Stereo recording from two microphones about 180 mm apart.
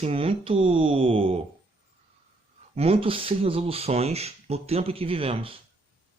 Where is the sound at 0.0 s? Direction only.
30° right (ahead or behind).